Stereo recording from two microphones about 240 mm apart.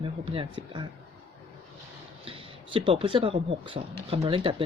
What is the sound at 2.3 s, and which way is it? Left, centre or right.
Speech, right.